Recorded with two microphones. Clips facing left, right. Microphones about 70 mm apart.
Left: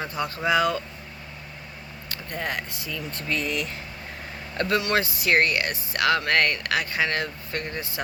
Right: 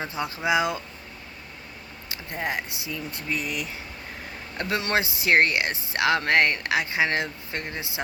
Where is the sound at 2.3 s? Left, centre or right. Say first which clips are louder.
Right 1 dB; right.